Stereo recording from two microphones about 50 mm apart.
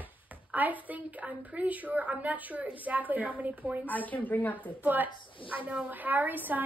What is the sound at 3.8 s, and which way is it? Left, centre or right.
Speech, left.